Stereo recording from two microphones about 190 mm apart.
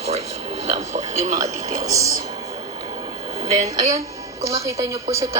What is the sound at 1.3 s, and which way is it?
Speech, 20° right (ahead or behind).